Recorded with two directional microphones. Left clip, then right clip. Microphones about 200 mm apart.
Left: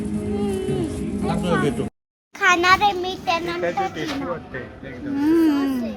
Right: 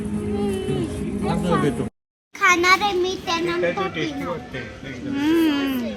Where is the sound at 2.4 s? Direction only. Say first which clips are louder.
Left 1 dB; 35° left (ahead or behind).